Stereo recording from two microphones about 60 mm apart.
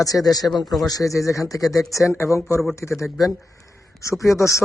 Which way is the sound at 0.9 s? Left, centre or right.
Left.